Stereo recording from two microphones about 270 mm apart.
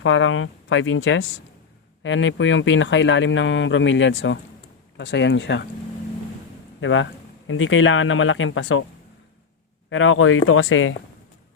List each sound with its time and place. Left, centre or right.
0.0 s speech: left
6.7 s speech: left
9.9 s speech: left